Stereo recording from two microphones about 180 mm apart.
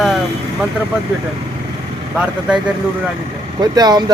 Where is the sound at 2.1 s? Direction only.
5° right (ahead or behind).